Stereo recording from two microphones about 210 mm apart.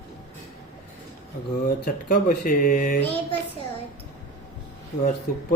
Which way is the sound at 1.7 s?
50° left (ahead or behind).